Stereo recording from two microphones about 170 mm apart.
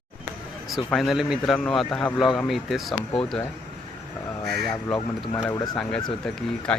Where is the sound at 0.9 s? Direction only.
Centre (ahead or behind).